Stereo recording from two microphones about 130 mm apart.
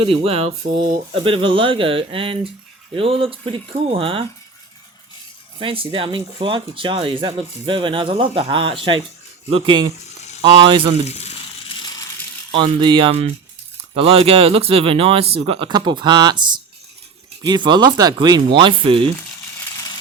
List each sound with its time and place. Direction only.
0.0 s speech: 45° right (ahead or behind)
5.5 s speech: 45° right (ahead or behind)
10.4 s speech: 40° right (ahead or behind)
11.0 s speech: 55° left (ahead or behind)
12.8 s speech: 40° right (ahead or behind)